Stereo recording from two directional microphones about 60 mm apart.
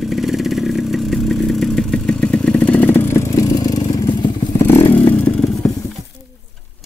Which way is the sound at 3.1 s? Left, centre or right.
Left.